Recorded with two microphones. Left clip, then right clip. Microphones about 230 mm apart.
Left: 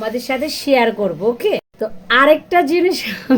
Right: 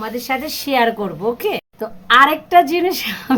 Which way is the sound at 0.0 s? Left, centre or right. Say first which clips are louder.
Left 2 dB; right.